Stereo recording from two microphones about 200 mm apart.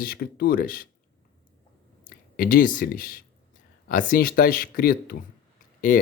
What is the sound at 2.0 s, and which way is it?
Speech, 45° left (ahead or behind).